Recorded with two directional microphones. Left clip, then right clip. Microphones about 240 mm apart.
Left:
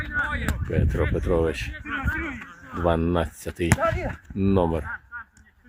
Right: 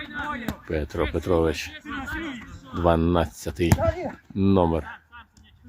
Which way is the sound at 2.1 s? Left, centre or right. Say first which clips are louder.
Left 2 dB; right.